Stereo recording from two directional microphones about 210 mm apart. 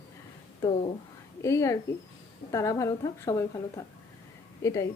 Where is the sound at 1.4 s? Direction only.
15° left (ahead or behind).